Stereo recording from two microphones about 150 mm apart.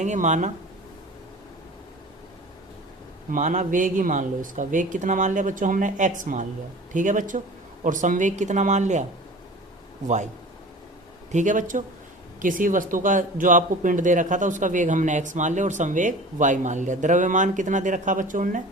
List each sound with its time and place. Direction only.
0.0 s speech: 55° right (ahead or behind)
3.3 s speech: 55° right (ahead or behind)
11.3 s speech: 55° right (ahead or behind)